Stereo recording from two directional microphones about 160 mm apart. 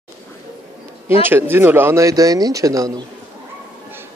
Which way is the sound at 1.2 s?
15° right (ahead or behind).